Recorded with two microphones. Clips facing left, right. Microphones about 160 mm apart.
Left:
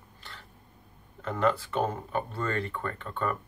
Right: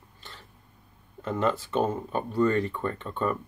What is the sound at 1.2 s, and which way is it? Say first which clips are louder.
Speech: even; 20° right (ahead or behind).